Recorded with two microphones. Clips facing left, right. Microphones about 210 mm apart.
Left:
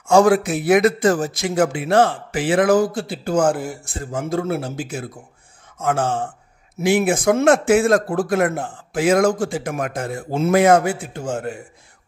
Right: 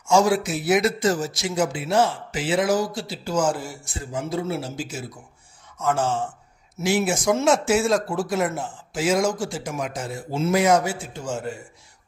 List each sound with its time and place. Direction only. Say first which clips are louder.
0.0 s a man's voice: left 5 dB; 60° left (ahead or behind)